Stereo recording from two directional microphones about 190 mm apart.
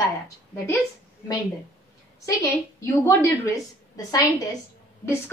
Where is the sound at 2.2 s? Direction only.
15° left (ahead or behind).